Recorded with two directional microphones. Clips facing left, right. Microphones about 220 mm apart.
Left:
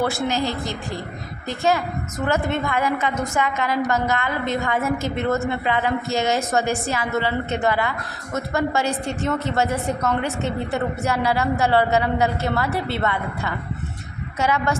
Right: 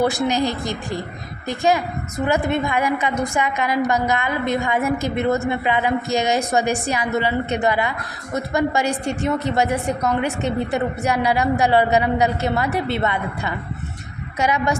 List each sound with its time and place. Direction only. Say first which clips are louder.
0.0 s a woman's voice: right 3 dB; 15° right (ahead or behind)